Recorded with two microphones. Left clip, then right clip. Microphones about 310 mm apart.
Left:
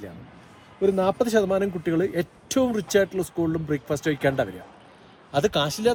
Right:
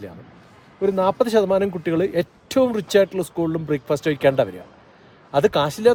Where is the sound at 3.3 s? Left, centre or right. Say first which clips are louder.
Right 3 dB; centre.